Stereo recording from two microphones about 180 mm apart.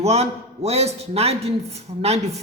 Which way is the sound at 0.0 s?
35° right (ahead or behind).